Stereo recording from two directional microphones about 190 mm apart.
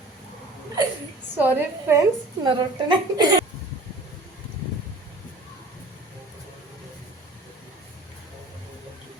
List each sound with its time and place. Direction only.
1.4 s a woman's voice: 10° right (ahead or behind)